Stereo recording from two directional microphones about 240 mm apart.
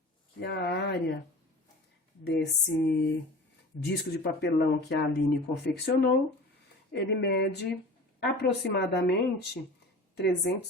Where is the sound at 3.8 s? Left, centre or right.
Left.